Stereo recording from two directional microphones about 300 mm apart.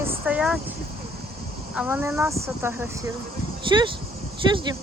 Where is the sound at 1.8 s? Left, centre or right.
Centre.